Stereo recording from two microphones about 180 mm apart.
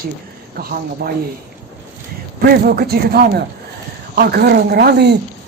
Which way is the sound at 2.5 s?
60° right (ahead or behind).